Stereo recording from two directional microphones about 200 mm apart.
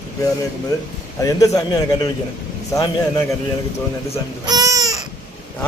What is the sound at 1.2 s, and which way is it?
A man's voice, 15° left (ahead or behind).